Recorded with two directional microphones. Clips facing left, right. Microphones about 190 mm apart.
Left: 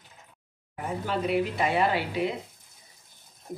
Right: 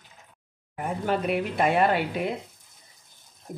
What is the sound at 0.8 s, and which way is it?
Speech, 55° right (ahead or behind).